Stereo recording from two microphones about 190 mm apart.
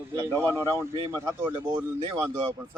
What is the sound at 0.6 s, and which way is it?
Speech, 15° right (ahead or behind).